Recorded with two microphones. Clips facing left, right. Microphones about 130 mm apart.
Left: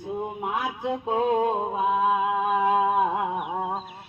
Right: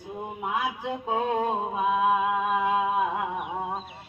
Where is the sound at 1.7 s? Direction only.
30° left (ahead or behind).